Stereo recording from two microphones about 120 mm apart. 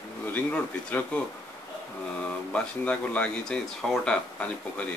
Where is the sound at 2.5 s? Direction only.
10° left (ahead or behind).